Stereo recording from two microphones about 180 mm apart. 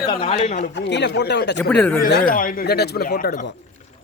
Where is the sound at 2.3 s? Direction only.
50° left (ahead or behind).